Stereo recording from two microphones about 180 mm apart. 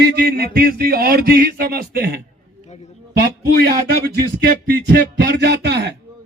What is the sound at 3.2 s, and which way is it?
A man's voice, 60° right (ahead or behind).